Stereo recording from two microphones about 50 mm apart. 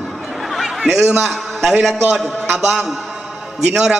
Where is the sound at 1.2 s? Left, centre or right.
Centre.